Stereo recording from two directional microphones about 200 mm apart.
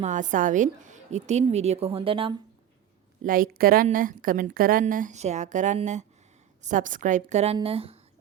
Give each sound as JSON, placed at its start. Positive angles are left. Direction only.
{"t": 0.0, "sound": "a woman's voice", "side_deg": -40}
{"t": 3.2, "sound": "a woman's voice", "side_deg": -45}